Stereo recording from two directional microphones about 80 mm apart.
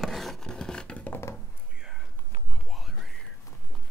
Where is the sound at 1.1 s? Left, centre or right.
Left.